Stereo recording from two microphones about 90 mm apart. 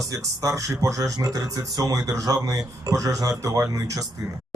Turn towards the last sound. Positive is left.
turn(degrees=-40)  # may be behind; listen again after turning